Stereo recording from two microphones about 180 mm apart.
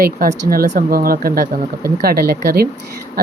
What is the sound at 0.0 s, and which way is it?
Speech, 55° right (ahead or behind).